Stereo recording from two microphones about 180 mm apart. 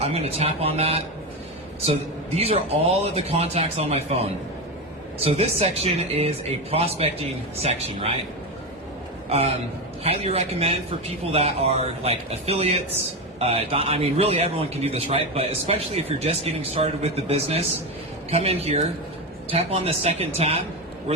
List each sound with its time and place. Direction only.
0.0 s a man's voice: 35° right (ahead or behind)
10.0 s a man's voice: 35° right (ahead or behind)